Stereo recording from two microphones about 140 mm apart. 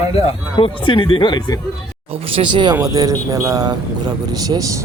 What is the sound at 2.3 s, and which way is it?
Speech, 35° right (ahead or behind).